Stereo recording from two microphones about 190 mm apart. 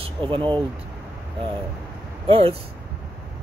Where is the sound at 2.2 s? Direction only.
30° right (ahead or behind).